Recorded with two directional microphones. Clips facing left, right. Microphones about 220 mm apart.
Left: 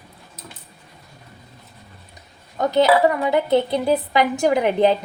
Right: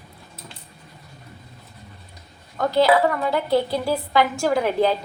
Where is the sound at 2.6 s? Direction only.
20° left (ahead or behind).